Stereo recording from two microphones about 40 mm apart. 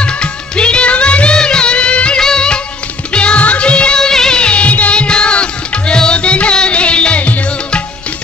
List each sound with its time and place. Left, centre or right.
0.0 s music: left
1.4 s music of bollywood: left
2.1 s music: centre
4.0 s music: centre
4.4 s music: left